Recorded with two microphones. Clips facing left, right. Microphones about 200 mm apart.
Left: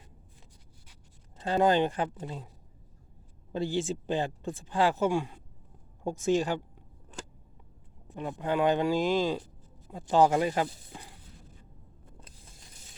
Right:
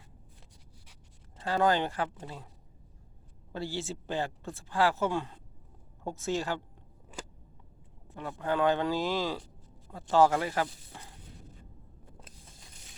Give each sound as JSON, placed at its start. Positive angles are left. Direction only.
{"t": 1.4, "sound": "speech", "side_deg": 20}
{"t": 3.5, "sound": "speech", "side_deg": 20}
{"t": 8.0, "sound": "speech", "side_deg": 15}